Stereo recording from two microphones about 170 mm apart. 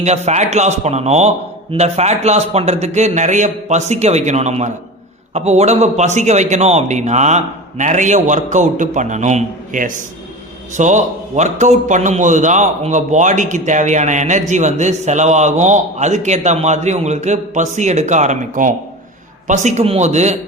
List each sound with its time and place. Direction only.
0.0 s a man's voice: 40° right (ahead or behind)